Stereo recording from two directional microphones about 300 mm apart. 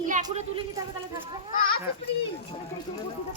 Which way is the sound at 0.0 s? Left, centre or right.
Right.